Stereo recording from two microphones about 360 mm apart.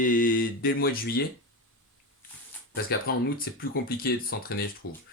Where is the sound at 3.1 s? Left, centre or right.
Left.